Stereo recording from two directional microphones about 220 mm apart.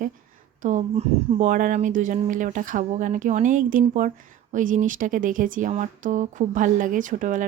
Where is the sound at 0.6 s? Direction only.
35° right (ahead or behind).